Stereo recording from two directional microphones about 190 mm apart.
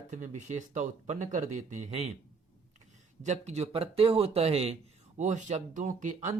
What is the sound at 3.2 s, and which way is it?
Speech, 35° right (ahead or behind).